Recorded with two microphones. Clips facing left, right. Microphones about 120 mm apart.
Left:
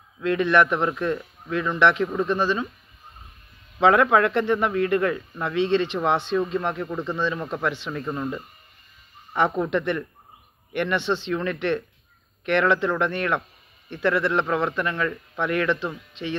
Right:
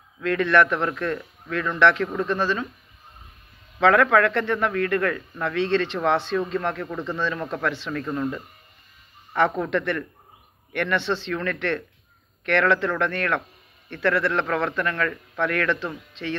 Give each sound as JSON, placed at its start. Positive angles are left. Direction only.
{"t": 0.2, "sound": "speech", "side_deg": 15}
{"t": 3.8, "sound": "speech", "side_deg": 20}